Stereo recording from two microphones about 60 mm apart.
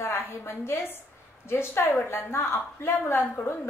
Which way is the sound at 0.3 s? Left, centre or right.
Left.